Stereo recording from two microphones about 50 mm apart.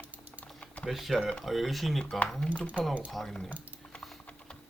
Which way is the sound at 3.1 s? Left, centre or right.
Centre.